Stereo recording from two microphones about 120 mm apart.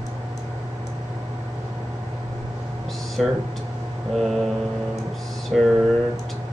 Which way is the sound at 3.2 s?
Centre (ahead or behind).